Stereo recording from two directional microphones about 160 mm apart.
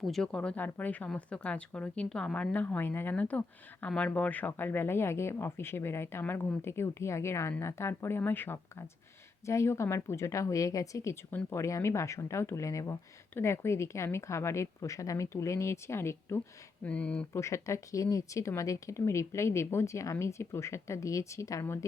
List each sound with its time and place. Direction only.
0.0 s speech: 5° left (ahead or behind)
17.4 s speech: 20° left (ahead or behind)